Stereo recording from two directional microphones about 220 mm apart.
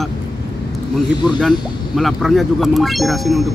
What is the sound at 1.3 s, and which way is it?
Speech, centre (ahead or behind).